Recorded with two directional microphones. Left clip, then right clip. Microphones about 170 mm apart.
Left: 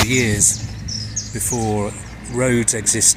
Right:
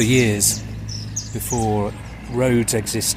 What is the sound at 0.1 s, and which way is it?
Speech, 40° right (ahead or behind).